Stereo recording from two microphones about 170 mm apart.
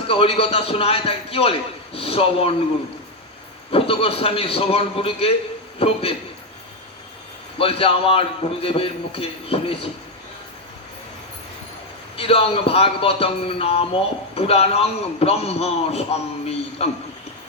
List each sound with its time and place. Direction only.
0.1 s a man's voice: 35° left (ahead or behind)
3.7 s a man's voice: 35° left (ahead or behind)
7.6 s a man's voice: 35° left (ahead or behind)
12.1 s a man's voice: 35° left (ahead or behind)
16.5 s a sound: 40° left (ahead or behind)